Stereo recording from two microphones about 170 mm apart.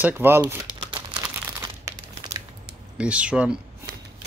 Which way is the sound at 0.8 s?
25° right (ahead or behind).